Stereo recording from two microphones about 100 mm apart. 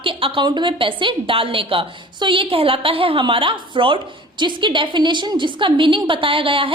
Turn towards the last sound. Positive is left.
turn(degrees=-60)  # may be behind; listen again after turning